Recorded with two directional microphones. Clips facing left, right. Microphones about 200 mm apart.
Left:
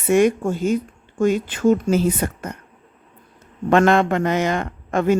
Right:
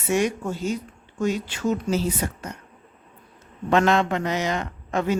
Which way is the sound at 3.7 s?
55° left (ahead or behind).